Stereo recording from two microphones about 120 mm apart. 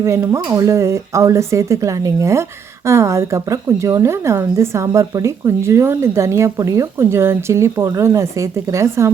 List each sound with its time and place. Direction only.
0.4 s a woman's voice: 30° right (ahead or behind)